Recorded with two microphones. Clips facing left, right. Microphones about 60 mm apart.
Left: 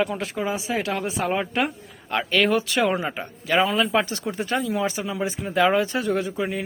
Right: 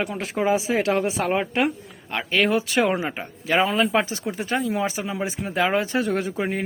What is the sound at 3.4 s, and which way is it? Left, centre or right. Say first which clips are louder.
Speech: even; right.